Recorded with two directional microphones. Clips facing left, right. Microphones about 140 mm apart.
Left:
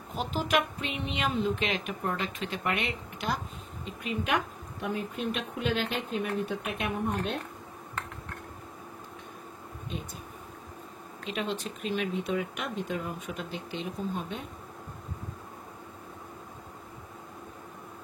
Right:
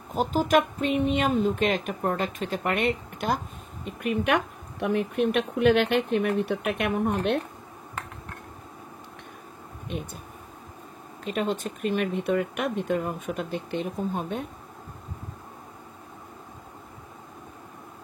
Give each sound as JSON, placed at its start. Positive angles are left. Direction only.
{"t": 0.1, "sound": "speech", "side_deg": -45}
{"t": 11.2, "sound": "speech", "side_deg": -45}